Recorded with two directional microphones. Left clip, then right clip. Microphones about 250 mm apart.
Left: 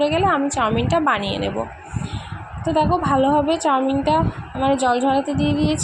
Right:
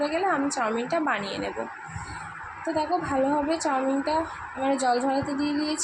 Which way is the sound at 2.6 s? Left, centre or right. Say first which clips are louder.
Left 8 dB; centre.